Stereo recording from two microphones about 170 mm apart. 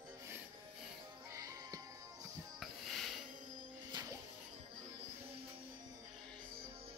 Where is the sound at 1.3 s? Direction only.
20° right (ahead or behind).